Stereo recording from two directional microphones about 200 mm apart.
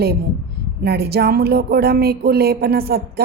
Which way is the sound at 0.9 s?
55° right (ahead or behind).